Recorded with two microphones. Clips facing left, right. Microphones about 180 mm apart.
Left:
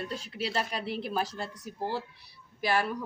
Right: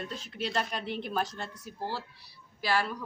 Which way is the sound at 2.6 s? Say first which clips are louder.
Left 1 dB; 15° left (ahead or behind).